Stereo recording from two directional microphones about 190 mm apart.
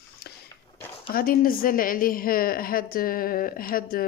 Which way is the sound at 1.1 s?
50° left (ahead or behind).